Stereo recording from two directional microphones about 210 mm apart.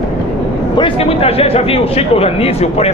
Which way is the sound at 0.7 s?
25° left (ahead or behind).